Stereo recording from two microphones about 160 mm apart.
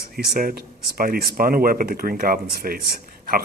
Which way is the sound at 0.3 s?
65° right (ahead or behind).